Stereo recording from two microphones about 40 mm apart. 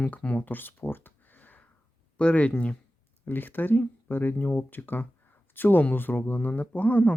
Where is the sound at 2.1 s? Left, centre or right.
Left.